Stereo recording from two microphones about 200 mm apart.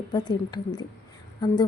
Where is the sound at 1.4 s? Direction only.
20° left (ahead or behind).